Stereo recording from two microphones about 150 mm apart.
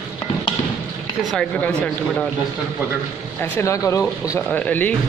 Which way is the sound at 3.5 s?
20° left (ahead or behind).